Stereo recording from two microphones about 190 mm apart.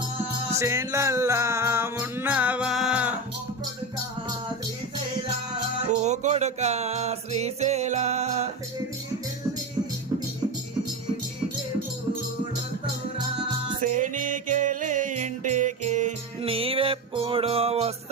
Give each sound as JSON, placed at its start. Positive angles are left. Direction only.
{"t": 0.6, "sound": "music", "side_deg": -15}
{"t": 6.0, "sound": "music", "side_deg": -35}
{"t": 13.8, "sound": "music", "side_deg": -40}